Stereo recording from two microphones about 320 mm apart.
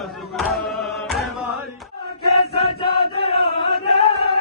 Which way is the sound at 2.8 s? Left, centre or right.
Centre.